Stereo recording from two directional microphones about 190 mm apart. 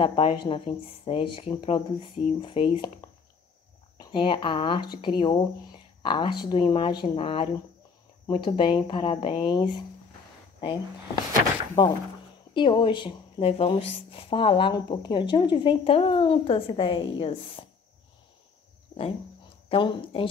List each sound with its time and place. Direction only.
0.0 s speech: 30° left (ahead or behind)
11.8 s speech: 20° left (ahead or behind)
18.9 s a sound: 20° left (ahead or behind)
19.7 s speech: 25° left (ahead or behind)